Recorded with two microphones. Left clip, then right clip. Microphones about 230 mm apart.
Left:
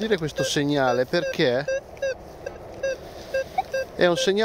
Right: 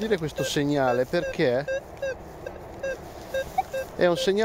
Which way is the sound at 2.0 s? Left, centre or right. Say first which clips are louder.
Left 4 dB; left.